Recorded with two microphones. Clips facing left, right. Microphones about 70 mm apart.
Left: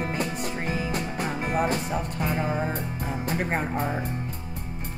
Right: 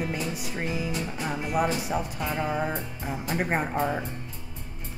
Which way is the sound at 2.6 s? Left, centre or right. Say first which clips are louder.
Left 1 dB; centre.